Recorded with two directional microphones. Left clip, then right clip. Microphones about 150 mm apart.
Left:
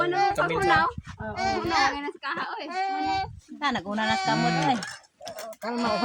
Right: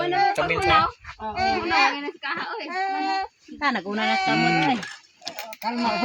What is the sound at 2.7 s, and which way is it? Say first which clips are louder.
Speech: right 2 dB; 40° right (ahead or behind).